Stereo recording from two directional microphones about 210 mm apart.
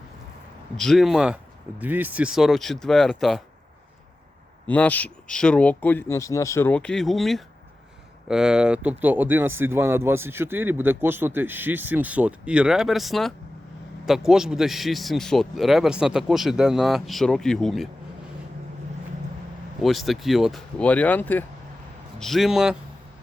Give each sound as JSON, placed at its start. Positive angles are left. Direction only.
{"t": 0.8, "sound": "a man's voice", "side_deg": 0}
{"t": 4.7, "sound": "a man's voice", "side_deg": 5}
{"t": 19.8, "sound": "a man's voice", "side_deg": 0}